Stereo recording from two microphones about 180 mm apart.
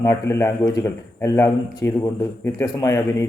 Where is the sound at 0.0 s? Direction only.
15° left (ahead or behind).